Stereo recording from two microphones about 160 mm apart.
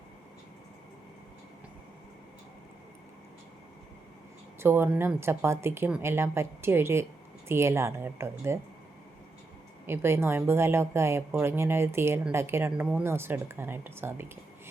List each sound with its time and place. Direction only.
4.6 s speech: 15° right (ahead or behind)
9.8 s speech: 15° right (ahead or behind)